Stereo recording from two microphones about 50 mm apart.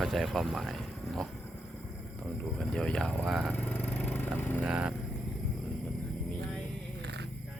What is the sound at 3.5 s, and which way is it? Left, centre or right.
Vehicle, left.